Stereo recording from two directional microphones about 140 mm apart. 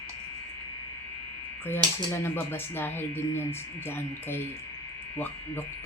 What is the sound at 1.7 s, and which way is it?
Speech, 15° left (ahead or behind).